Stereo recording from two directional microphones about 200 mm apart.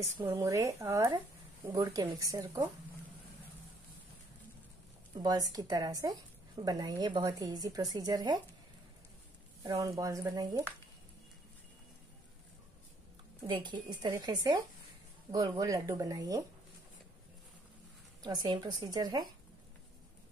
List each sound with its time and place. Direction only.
0.2 s speech: 15° right (ahead or behind)
5.1 s a woman's voice: 20° right (ahead or behind)
9.6 s speech: 15° right (ahead or behind)
13.5 s a woman's voice: 20° right (ahead or behind)
18.2 s a woman's voice: 20° right (ahead or behind)